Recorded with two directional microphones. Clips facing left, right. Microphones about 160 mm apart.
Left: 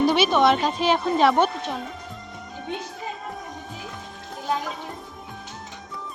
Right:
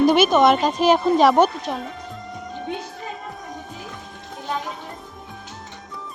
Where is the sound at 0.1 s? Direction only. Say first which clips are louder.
Right 4 dB; 50° right (ahead or behind).